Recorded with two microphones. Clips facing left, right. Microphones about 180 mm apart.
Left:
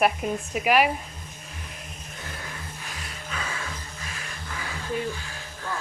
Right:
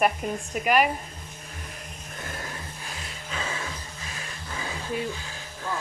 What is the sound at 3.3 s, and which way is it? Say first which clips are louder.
Vehicle: right 1 dB; 25° right (ahead or behind).